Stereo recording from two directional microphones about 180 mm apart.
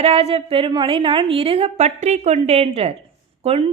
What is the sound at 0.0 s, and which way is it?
A woman's voice, 35° right (ahead or behind).